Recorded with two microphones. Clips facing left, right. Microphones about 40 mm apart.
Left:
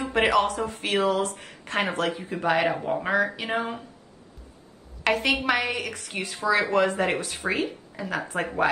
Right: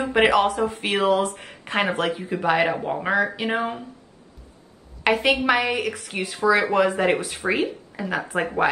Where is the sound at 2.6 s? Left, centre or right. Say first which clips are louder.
Right 3 dB; right.